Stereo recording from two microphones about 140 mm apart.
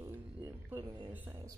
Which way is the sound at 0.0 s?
20° right (ahead or behind).